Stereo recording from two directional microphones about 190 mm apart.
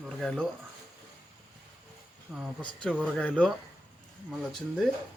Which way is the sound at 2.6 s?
25° left (ahead or behind).